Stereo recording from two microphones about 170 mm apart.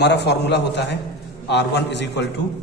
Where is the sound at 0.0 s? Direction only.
85° left.